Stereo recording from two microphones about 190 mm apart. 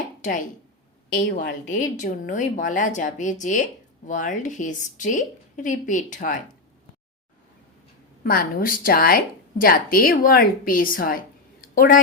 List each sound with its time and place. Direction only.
0.2 s speech: 40° left (ahead or behind)
1.1 s a woman's voice: 60° left (ahead or behind)
1.7 s a woman's voice: 40° left (ahead or behind)
8.2 s a woman's voice: 50° left (ahead or behind)
11.6 s a sound: 45° left (ahead or behind)